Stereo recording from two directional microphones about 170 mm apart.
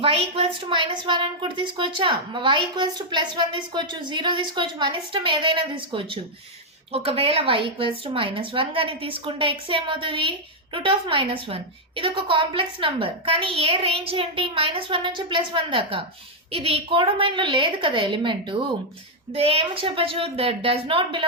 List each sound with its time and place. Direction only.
0.0 s a woman's voice: 35° right (ahead or behind)